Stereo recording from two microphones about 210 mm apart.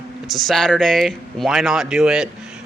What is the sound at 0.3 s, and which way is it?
A man's voice, centre (ahead or behind).